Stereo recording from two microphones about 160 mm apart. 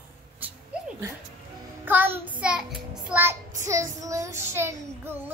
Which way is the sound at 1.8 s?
10° right (ahead or behind).